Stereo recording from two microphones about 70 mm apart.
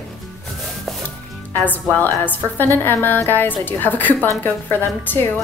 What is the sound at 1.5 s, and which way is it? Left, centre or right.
A woman's voice, left.